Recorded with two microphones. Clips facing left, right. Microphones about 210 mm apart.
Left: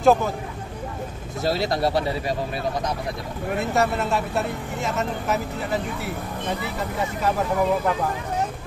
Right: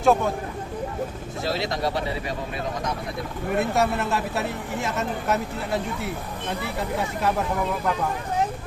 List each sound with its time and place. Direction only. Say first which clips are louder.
0.0 s speech: left 2 dB; centre (ahead or behind)
1.4 s speech: left 4 dB; 40° left (ahead or behind)
3.5 s speech: even; centre (ahead or behind)